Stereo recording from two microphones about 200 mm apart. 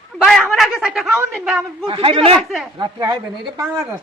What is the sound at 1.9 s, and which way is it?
Speech, 25° right (ahead or behind).